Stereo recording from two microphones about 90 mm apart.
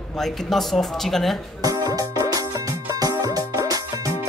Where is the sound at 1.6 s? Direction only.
45° right (ahead or behind).